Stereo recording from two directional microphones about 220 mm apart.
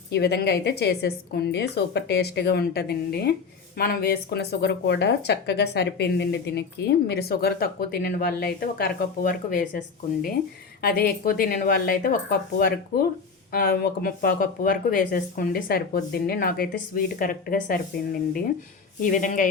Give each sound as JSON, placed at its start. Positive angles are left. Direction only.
{"t": 0.1, "sound": "speech", "side_deg": 45}